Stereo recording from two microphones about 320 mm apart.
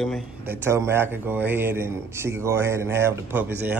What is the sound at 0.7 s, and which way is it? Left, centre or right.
Speech, centre.